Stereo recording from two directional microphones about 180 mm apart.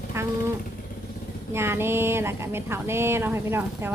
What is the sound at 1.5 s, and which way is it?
Speech, 15° right (ahead or behind).